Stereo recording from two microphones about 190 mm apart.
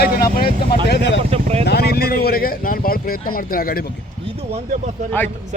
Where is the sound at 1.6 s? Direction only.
55° left (ahead or behind).